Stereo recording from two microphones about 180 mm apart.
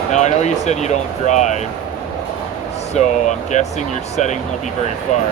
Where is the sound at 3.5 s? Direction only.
40° left (ahead or behind).